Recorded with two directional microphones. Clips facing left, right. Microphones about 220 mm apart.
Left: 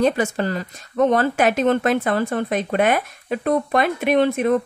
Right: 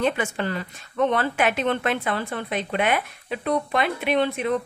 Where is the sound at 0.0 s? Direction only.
40° left (ahead or behind).